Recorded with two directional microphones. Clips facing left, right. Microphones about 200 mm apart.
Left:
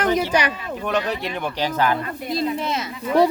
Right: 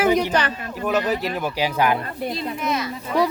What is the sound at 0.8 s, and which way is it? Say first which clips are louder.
Speech: right 2 dB; 5° right (ahead or behind).